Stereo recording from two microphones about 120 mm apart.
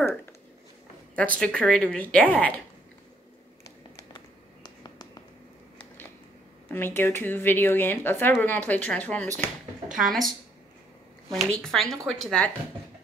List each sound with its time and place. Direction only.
1.1 s speech: 10° left (ahead or behind)
4.6 s finger snapping: 35° left (ahead or behind)
6.7 s speech: 20° left (ahead or behind)
9.9 s a woman's voice: centre (ahead or behind)
11.3 s a woman's voice: 5° left (ahead or behind)